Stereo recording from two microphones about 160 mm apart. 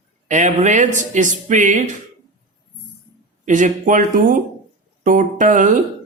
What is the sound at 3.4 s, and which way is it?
Speech, 50° right (ahead or behind).